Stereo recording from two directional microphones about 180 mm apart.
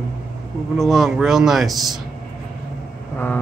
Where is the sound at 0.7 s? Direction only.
Centre (ahead or behind).